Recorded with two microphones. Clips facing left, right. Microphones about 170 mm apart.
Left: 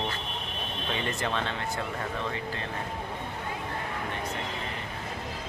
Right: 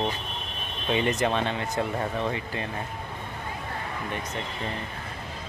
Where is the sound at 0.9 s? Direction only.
15° right (ahead or behind).